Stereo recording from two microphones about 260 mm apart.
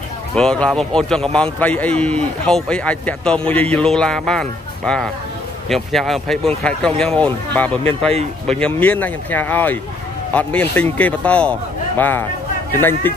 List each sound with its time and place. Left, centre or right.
0.4 s a man's voice: centre